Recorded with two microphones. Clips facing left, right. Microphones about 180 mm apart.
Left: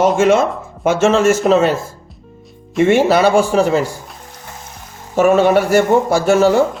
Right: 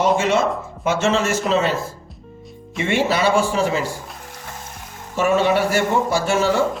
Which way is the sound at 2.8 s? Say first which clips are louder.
Left 7 dB; 50° left (ahead or behind).